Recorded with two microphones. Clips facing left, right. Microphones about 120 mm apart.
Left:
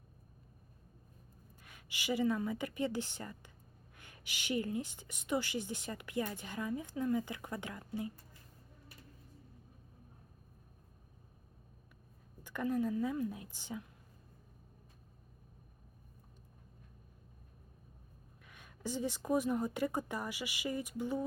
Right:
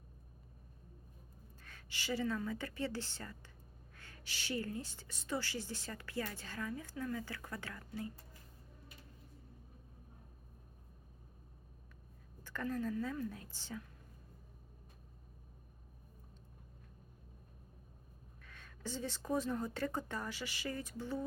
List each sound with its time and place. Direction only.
1.6 s a woman's voice: 15° left (ahead or behind)
12.4 s a woman's voice: 15° left (ahead or behind)
18.4 s a woman's voice: 15° left (ahead or behind)